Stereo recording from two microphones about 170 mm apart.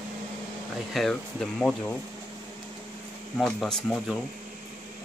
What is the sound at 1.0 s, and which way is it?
Speech, 5° left (ahead or behind).